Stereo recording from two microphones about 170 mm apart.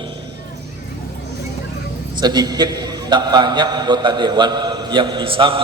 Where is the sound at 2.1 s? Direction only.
25° right (ahead or behind).